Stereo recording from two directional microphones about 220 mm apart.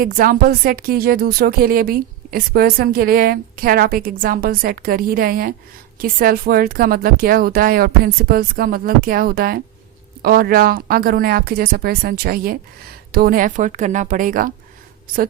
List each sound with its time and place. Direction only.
0.0 s speech: 40° right (ahead or behind)